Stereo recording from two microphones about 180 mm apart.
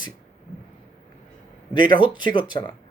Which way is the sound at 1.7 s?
25° left (ahead or behind).